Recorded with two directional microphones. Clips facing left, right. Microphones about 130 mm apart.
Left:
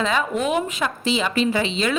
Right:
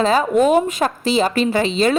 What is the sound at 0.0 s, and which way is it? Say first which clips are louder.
A woman's voice: right 7 dB; 35° right (ahead or behind).